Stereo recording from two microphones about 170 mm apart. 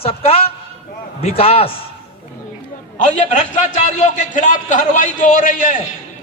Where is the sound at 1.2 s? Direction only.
35° left (ahead or behind).